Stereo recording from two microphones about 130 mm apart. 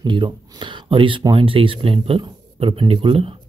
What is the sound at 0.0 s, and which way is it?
Speech, 40° right (ahead or behind).